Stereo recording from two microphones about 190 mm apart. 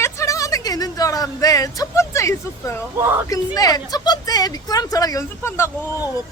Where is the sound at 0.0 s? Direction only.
15° left (ahead or behind).